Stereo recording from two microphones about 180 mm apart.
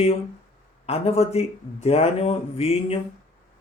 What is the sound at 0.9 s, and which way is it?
Speech, 35° left (ahead or behind).